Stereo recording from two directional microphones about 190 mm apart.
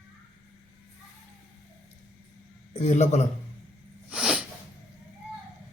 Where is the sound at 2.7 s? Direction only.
40° left (ahead or behind).